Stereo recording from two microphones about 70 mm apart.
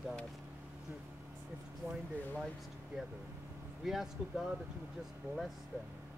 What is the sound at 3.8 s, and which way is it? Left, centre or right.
Speech, centre.